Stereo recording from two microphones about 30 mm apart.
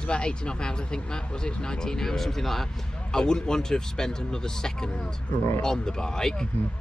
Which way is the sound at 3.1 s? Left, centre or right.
Left.